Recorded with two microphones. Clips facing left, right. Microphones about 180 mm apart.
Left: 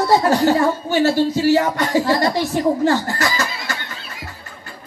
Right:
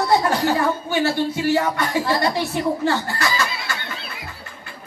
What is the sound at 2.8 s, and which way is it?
Snicker, 40° left (ahead or behind).